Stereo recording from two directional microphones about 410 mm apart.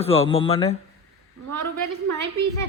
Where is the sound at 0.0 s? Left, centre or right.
Centre.